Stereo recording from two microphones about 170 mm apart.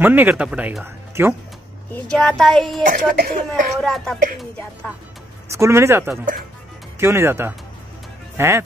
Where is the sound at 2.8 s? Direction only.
55° right (ahead or behind).